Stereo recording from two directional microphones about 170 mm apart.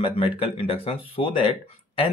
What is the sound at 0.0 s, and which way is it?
Speech, 35° left (ahead or behind).